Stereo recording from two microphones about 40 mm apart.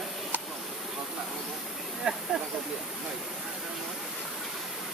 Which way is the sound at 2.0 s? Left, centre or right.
Right.